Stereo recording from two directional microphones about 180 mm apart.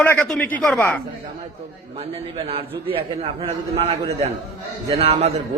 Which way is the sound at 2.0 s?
30° right (ahead or behind).